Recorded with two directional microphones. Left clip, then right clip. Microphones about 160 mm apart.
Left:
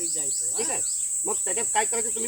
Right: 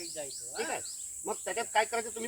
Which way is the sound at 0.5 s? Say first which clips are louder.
Left 2 dB; 5° right (ahead or behind).